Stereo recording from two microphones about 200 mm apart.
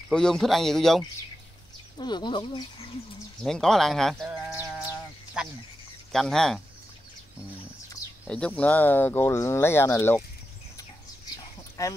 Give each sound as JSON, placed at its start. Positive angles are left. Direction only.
{"t": 0.1, "sound": "speech", "side_deg": 5}
{"t": 2.0, "sound": "speech", "side_deg": 20}
{"t": 3.4, "sound": "speech", "side_deg": 0}
{"t": 5.4, "sound": "chicken", "side_deg": -5}
{"t": 6.1, "sound": "speech", "side_deg": 0}
{"t": 8.3, "sound": "speech", "side_deg": 5}
{"t": 11.8, "sound": "speech", "side_deg": 15}